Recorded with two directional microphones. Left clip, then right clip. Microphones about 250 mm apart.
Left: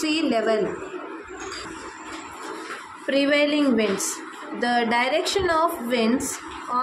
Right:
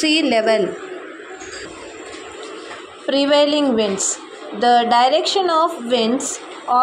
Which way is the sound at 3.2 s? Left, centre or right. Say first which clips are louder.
Right 6 dB; centre.